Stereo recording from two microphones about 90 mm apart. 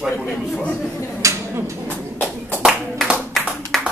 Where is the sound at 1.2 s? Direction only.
35° right (ahead or behind).